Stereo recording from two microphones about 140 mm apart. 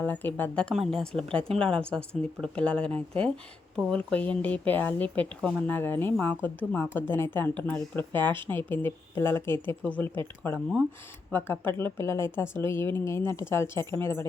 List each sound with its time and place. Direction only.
0.0 s a woman's voice: 15° left (ahead or behind)